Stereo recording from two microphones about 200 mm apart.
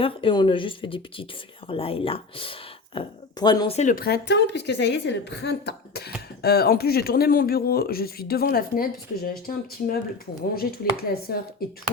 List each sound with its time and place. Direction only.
0.0 s speech: 25° left (ahead or behind)
3.8 s a woman's voice: 40° left (ahead or behind)
10.5 s speech: 50° left (ahead or behind)